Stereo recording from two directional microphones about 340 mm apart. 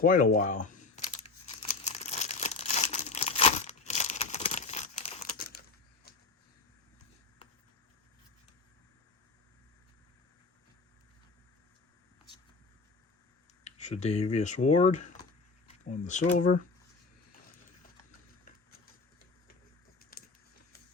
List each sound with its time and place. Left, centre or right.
0.0 s camera: left
1.8 s crumpling: centre
13.7 s speech: centre
20.0 s a sound: left